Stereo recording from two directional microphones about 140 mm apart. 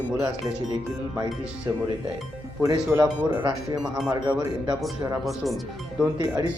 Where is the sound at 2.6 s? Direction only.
20° right (ahead or behind).